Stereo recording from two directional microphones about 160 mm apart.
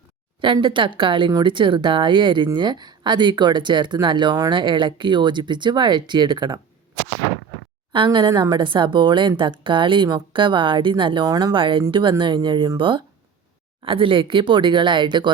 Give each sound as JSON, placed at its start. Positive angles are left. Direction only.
{"t": 0.4, "sound": "speech", "side_deg": -30}
{"t": 7.9, "sound": "speech", "side_deg": -30}